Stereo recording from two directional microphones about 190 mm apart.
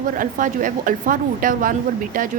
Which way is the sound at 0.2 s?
45° right (ahead or behind).